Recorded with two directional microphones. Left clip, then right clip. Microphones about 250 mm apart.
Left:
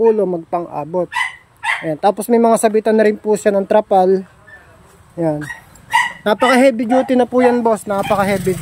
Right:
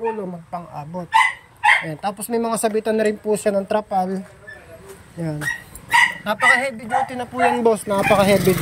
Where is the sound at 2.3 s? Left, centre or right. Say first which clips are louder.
Left 7 dB; left.